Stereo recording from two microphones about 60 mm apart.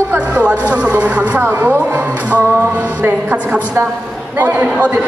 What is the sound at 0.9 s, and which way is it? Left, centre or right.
Speech, right.